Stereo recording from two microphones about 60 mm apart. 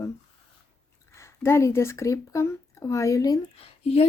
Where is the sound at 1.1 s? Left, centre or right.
Left.